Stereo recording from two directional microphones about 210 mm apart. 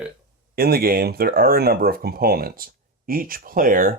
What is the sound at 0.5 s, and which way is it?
Speech, 45° right (ahead or behind).